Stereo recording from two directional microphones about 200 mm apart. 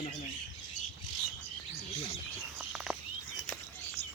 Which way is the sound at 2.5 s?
5° right (ahead or behind).